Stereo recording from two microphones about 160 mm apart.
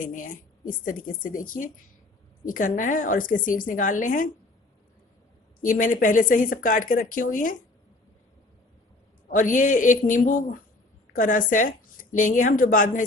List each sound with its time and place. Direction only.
0.0 s speech: 55° left (ahead or behind)
5.6 s speech: 55° left (ahead or behind)
9.3 s speech: 55° left (ahead or behind)